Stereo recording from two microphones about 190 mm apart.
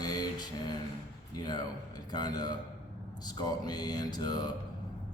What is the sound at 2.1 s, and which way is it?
Mantra, 20° left (ahead or behind).